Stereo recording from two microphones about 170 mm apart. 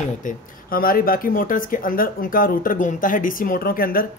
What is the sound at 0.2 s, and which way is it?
Speech, 55° left (ahead or behind).